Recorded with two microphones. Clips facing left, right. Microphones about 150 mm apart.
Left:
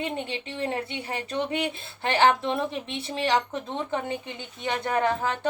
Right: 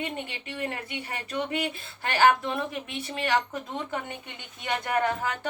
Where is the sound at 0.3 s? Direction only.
30° left (ahead or behind).